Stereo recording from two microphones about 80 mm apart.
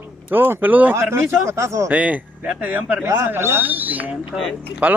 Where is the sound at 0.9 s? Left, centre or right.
Right.